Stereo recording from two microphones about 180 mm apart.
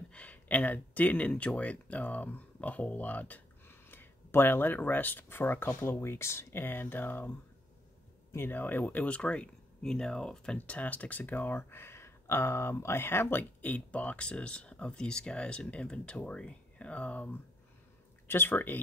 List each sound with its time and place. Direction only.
0.1 s speech: 10° left (ahead or behind)